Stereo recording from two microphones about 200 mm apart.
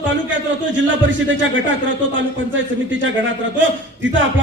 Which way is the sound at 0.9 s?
70° right (ahead or behind).